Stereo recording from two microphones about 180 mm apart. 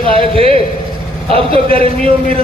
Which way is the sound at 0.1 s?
30° right (ahead or behind).